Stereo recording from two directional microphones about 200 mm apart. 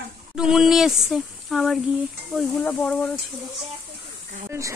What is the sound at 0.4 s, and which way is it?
Speech, 5° right (ahead or behind).